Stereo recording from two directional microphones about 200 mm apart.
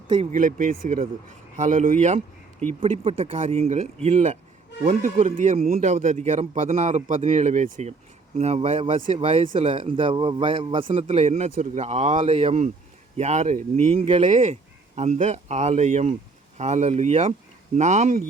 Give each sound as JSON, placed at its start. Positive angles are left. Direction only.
{"t": 0.1, "sound": "a man's voice", "side_deg": -35}